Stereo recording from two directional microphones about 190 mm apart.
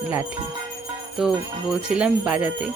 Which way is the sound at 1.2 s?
Centre (ahead or behind).